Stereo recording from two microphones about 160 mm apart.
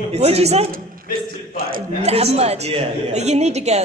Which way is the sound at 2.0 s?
40° right (ahead or behind).